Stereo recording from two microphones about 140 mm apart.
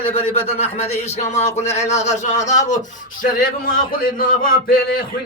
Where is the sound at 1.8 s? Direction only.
50° left (ahead or behind).